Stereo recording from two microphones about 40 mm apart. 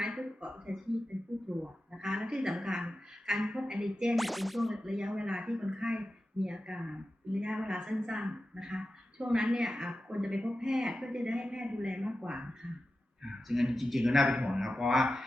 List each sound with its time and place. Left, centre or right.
0.3 s a sound: right
1.1 s a sound: right
1.5 s a sound: centre
3.2 s speech: centre
4.1 s whip: centre
4.8 s speech: centre
13.2 s a man's voice: centre
14.3 s speech: centre
14.8 s a man's voice: centre